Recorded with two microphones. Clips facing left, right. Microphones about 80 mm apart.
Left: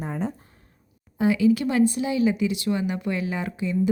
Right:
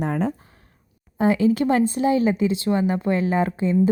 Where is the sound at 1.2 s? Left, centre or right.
Right.